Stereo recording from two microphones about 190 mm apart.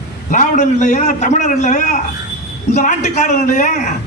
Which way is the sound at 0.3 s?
40° left (ahead or behind).